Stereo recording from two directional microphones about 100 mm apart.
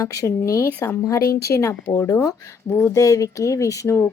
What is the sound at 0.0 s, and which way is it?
A woman's voice, 35° left (ahead or behind).